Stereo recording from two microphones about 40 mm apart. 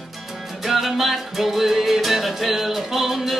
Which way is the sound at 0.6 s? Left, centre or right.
Centre.